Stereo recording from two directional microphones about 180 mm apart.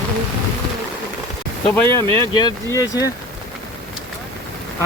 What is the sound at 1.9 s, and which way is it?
Speech, 20° left (ahead or behind).